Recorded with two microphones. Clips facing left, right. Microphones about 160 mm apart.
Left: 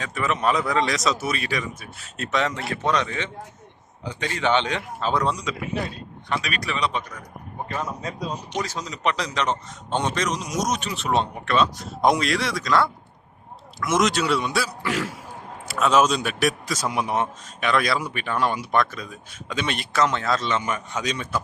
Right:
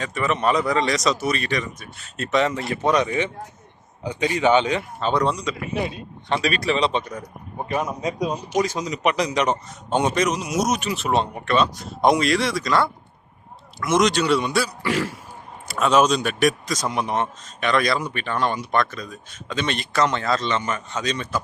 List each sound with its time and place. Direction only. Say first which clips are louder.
0.0 s a man's voice: right 2 dB; centre (ahead or behind)
2.8 s a man's voice: right 4 dB; 10° right (ahead or behind)
5.8 s speech: right 4 dB; 30° right (ahead or behind)
7.7 s a man's voice: right 6 dB; 15° right (ahead or behind); by 21.2 s 10° left (ahead or behind)